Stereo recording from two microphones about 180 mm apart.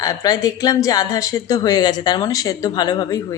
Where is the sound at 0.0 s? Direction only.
20° left (ahead or behind).